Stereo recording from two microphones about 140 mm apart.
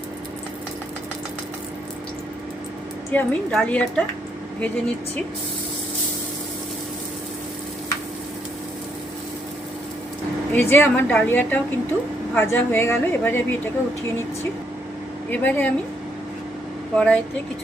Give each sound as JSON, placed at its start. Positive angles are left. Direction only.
{"t": 3.1, "sound": "a woman's voice", "side_deg": 10}
{"t": 10.5, "sound": "a woman's voice", "side_deg": 15}
{"t": 15.3, "sound": "a woman's voice", "side_deg": 10}
{"t": 16.9, "sound": "a woman's voice", "side_deg": 5}